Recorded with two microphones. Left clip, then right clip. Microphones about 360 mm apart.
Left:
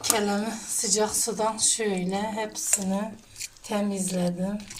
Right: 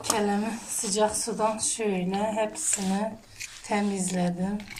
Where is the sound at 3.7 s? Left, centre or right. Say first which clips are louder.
Right 1 dB; left.